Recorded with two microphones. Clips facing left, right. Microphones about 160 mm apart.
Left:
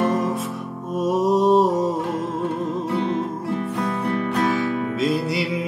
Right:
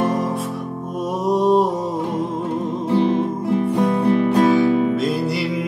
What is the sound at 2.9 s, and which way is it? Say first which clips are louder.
Music: right 9 dB; 30° right (ahead or behind).